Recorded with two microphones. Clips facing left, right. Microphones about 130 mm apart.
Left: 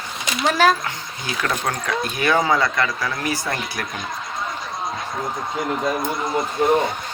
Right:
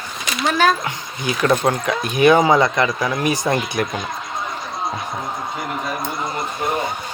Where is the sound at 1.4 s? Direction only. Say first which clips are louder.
Right 7 dB; 20° right (ahead or behind).